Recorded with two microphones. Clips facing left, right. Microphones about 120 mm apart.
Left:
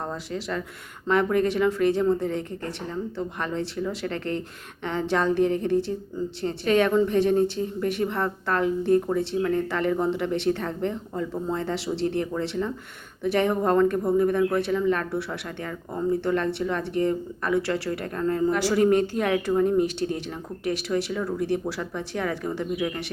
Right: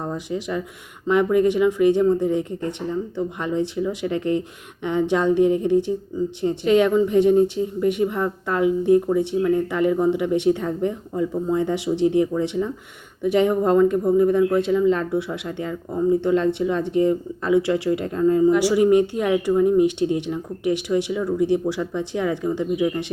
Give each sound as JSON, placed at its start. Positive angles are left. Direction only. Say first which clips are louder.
{"t": 0.0, "sound": "speech", "louder": "right 4 dB", "side_deg": -15}